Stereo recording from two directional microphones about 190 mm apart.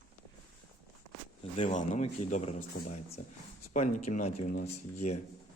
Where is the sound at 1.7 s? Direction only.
40° left (ahead or behind).